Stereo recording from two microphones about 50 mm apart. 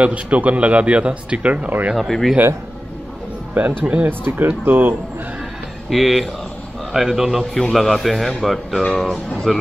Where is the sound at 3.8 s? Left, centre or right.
Right.